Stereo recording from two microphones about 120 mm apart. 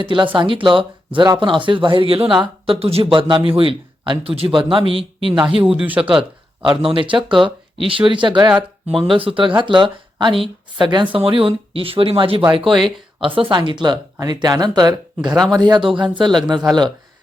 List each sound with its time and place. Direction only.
0.0 s speech: 45° right (ahead or behind)
5.7 s speech: 10° right (ahead or behind)
6.6 s speech: 50° right (ahead or behind)
12.6 s speech: centre (ahead or behind)
13.1 s speech: 45° right (ahead or behind)